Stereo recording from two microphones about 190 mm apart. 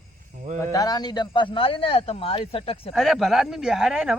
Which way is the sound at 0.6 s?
20° left (ahead or behind).